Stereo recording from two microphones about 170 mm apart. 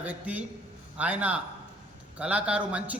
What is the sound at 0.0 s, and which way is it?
A man's voice, 10° right (ahead or behind).